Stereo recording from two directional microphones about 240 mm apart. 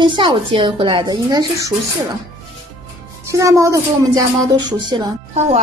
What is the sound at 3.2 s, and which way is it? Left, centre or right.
A woman's voice, centre.